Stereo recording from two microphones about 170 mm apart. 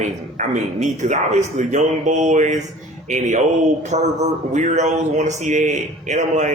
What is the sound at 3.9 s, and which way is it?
A man's voice, 45° right (ahead or behind).